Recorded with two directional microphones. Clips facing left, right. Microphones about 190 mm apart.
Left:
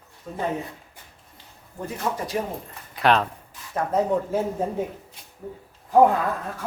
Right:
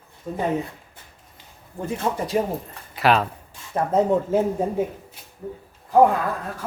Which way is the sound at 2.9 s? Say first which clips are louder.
Right 1 dB; 5° right (ahead or behind).